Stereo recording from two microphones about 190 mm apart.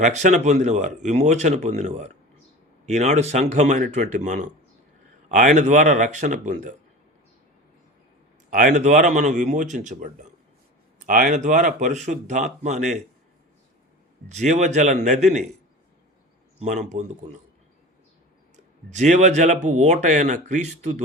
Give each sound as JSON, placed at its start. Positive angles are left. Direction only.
{"t": 0.0, "sound": "speech", "side_deg": -40}
{"t": 8.4, "sound": "speech", "side_deg": -45}
{"t": 14.3, "sound": "speech", "side_deg": -40}
{"t": 16.6, "sound": "speech", "side_deg": -35}
{"t": 18.5, "sound": "speech", "side_deg": -40}